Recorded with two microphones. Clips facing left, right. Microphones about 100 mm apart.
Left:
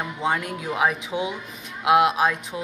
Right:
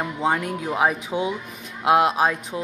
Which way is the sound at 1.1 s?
25° right (ahead or behind).